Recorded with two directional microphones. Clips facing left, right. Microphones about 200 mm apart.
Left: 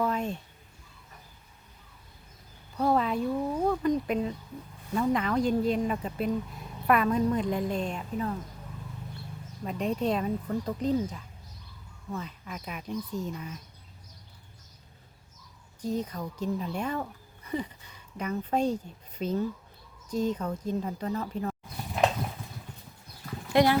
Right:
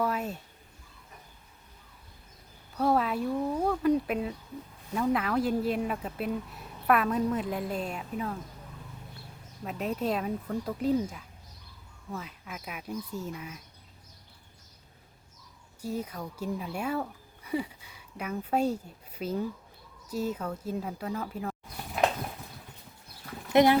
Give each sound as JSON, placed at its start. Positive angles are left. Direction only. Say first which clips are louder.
{"t": 0.0, "sound": "speech", "louder": "left 1 dB", "side_deg": -5}
{"t": 2.7, "sound": "speech", "louder": "left 1 dB", "side_deg": -5}
{"t": 9.6, "sound": "speech", "louder": "left 2 dB", "side_deg": -5}
{"t": 15.8, "sound": "speech", "louder": "left 3 dB", "side_deg": -10}
{"t": 23.5, "sound": "speech", "louder": "right 2 dB", "side_deg": -20}